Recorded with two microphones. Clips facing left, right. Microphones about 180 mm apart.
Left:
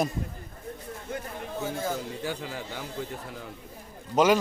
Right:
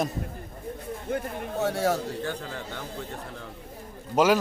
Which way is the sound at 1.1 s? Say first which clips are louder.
Right 6 dB; 55° right (ahead or behind).